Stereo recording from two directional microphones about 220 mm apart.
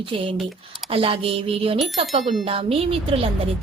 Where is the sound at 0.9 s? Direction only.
25° right (ahead or behind).